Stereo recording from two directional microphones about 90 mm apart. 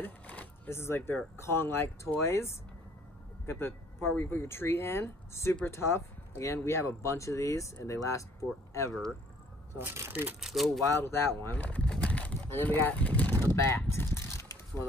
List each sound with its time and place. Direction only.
0.0 s a sound: 15° left (ahead or behind)
0.7 s speech: 25° left (ahead or behind)
9.8 s speech: 25° right (ahead or behind)
10.4 s speech: centre (ahead or behind)
10.9 s speech: 25° left (ahead or behind)
11.9 s vehicle: 15° left (ahead or behind)
13.6 s speech: 30° left (ahead or behind)
14.2 s a sound: 30° left (ahead or behind)